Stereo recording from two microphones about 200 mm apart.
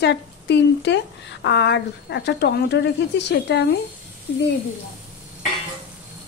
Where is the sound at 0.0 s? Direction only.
60° left (ahead or behind).